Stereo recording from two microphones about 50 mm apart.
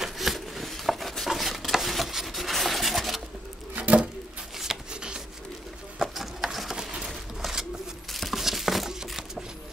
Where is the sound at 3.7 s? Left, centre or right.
Right.